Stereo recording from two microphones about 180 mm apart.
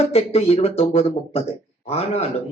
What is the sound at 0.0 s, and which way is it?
Speech, 35° left (ahead or behind).